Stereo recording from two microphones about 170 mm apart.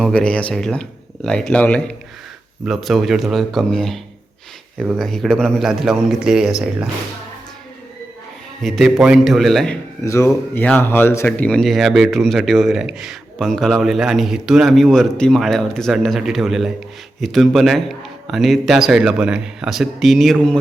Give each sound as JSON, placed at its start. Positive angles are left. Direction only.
{"t": 0.0, "sound": "speech", "side_deg": 5}
{"t": 8.6, "sound": "speech", "side_deg": 0}
{"t": 10.0, "sound": "speech", "side_deg": 15}